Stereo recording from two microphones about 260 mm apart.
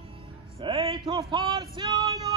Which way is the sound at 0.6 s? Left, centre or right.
Centre.